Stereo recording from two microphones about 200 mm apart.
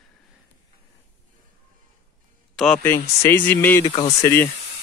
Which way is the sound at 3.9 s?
30° left (ahead or behind).